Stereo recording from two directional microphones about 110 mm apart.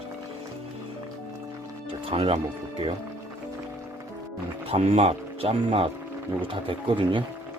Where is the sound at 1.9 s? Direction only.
60° right (ahead or behind).